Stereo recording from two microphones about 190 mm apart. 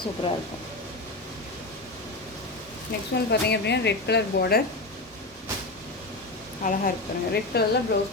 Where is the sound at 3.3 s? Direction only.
60° left (ahead or behind).